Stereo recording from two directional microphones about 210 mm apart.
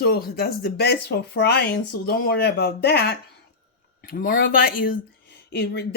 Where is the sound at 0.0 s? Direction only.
45° left (ahead or behind).